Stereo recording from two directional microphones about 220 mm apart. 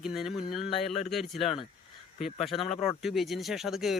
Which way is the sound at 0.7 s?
25° left (ahead or behind).